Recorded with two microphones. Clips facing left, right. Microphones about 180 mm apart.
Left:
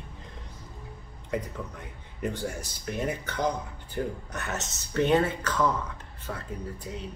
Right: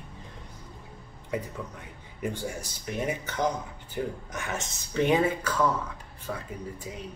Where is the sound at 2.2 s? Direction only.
10° right (ahead or behind).